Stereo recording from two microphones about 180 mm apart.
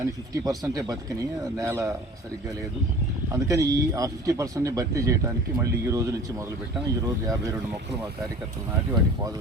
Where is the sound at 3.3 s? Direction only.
20° right (ahead or behind).